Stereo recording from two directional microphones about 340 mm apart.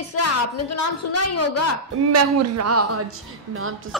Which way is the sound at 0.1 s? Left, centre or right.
Left.